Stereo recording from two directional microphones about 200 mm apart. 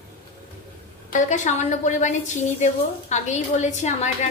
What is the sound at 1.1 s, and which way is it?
A woman's voice, 40° left (ahead or behind).